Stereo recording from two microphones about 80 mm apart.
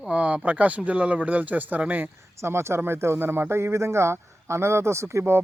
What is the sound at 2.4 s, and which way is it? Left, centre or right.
Speech, right.